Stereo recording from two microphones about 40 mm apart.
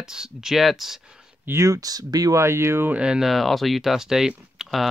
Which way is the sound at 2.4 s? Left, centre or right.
Right.